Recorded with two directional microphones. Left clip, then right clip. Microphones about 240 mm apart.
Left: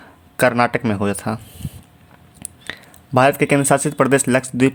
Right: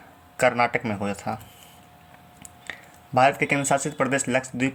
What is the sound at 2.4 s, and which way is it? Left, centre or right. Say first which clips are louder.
Speech: left 6 dB; left.